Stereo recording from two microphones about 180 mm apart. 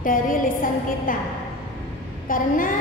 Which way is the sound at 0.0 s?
50° left (ahead or behind).